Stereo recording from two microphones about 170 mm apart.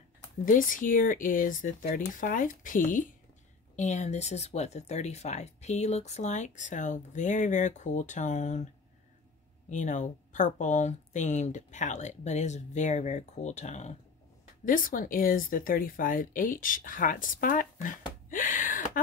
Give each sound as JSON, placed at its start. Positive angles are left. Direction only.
{"t": 0.5, "sound": "speech", "side_deg": 50}
{"t": 9.7, "sound": "speech", "side_deg": 45}
{"t": 14.6, "sound": "speech", "side_deg": 50}